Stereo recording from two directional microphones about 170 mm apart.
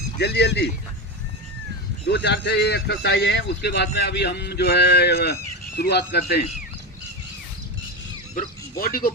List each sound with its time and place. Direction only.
0.2 s a man's voice: 80° left
2.0 s a man's voice: 80° left
8.8 s speech: 60° left (ahead or behind)